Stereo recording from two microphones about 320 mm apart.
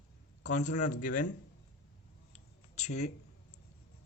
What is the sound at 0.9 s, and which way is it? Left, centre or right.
Speech, left.